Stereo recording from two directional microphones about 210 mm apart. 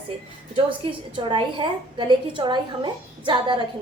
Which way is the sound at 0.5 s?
25° right (ahead or behind).